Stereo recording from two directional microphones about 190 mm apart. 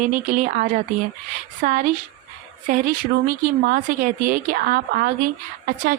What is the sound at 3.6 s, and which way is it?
A woman's voice, 50° right (ahead or behind).